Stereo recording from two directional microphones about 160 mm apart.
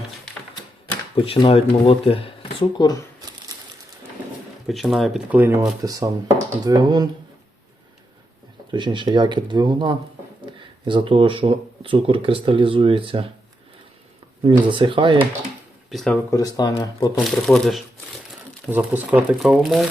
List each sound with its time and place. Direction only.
1.1 s speech: 35° left (ahead or behind)
4.6 s speech: centre (ahead or behind)
5.3 s speech: 10° right (ahead or behind)
5.8 s speech: 25° right (ahead or behind)
8.7 s speech: 30° right (ahead or behind)
14.7 s speech: 30° right (ahead or behind)
15.9 s speech: centre (ahead or behind)
16.3 s speech: 20° left (ahead or behind)
17.2 s speech: centre (ahead or behind)
18.7 s speech: 10° right (ahead or behind)